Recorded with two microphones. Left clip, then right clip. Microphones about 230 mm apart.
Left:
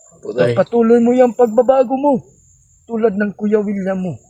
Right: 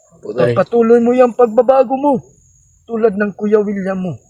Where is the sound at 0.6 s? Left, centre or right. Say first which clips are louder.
Right 2 dB; right.